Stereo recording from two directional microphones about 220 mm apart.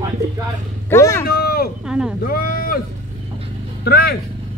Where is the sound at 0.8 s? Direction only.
10° left (ahead or behind).